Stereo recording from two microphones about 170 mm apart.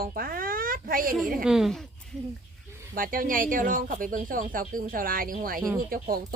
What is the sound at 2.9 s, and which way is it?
Speech, 55° right (ahead or behind).